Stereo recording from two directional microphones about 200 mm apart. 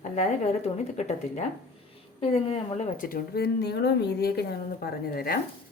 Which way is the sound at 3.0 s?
50° left (ahead or behind).